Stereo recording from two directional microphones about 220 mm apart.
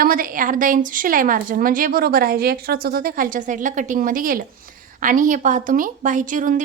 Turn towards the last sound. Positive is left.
turn(degrees=-35)  # may be behind; listen again after turning